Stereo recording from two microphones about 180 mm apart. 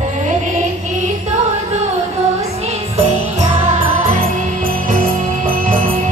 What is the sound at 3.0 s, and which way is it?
Music, 40° right (ahead or behind).